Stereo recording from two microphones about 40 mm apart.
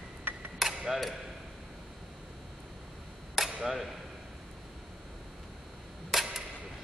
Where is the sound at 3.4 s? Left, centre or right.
Centre.